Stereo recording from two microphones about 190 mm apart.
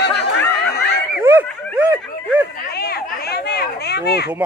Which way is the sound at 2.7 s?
55° left (ahead or behind).